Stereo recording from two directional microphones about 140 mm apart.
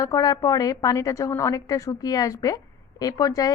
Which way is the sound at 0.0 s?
25° left (ahead or behind).